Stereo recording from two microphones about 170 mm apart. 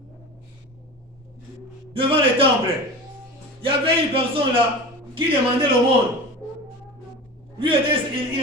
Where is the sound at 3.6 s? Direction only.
35° right (ahead or behind).